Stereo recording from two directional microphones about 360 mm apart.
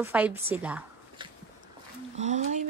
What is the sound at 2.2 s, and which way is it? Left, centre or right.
Speech, centre.